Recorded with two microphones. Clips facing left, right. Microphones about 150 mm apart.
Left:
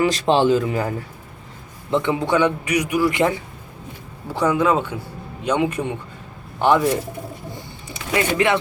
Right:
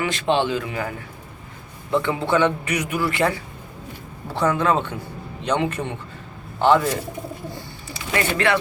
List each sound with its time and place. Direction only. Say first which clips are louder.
0.0 s speech: left 4 dB; 35° left (ahead or behind)
1.9 s a man's voice: left 1 dB; 20° left (ahead or behind)
7.5 s a sound: even; 20° left (ahead or behind)